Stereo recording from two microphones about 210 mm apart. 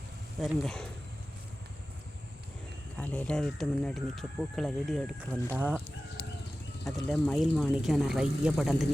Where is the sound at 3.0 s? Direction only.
5° left (ahead or behind); by 5.8 s 10° right (ahead or behind).